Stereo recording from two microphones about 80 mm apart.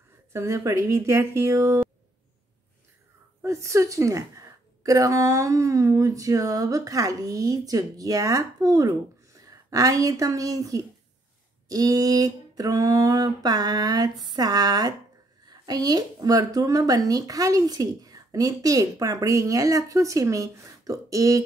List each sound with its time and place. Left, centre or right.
0.3 s speech: right
3.4 s a woman's voice: right